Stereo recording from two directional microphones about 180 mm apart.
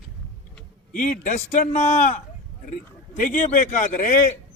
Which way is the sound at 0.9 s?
40° left (ahead or behind).